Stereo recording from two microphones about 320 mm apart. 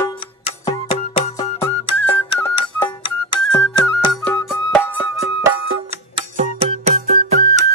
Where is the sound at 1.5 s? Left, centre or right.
Centre.